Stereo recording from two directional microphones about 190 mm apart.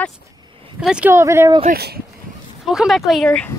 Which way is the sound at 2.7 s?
Centre (ahead or behind).